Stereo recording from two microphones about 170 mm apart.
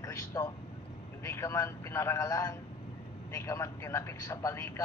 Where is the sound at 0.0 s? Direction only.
20° left (ahead or behind).